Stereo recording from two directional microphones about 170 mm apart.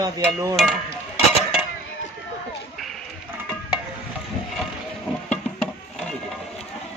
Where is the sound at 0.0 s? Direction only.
20° right (ahead or behind).